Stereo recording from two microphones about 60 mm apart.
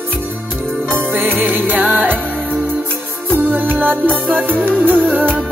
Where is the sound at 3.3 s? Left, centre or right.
Right.